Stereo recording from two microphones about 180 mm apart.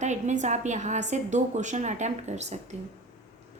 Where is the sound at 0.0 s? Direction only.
40° right (ahead or behind).